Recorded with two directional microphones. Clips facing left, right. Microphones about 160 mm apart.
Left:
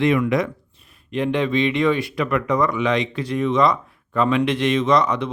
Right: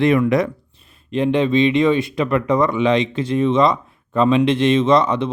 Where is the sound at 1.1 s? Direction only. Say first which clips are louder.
Right 4 dB; 25° right (ahead or behind).